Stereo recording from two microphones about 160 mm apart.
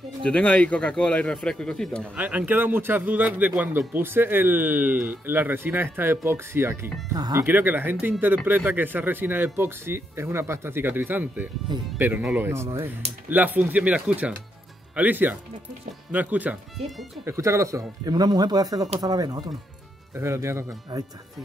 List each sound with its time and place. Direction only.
0.2 s a man's voice: 5° left (ahead or behind)
2.1 s a man's voice: 10° right (ahead or behind)